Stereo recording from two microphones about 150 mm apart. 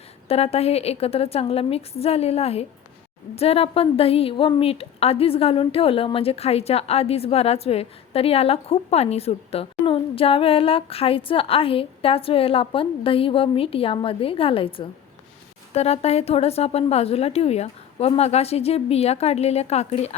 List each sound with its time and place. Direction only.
0.3 s a woman's voice: 45° left (ahead or behind)